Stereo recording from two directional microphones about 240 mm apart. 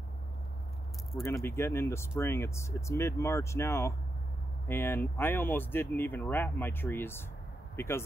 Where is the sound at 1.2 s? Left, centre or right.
Centre.